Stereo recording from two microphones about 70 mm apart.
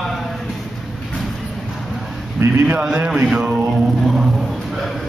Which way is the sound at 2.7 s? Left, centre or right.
Centre.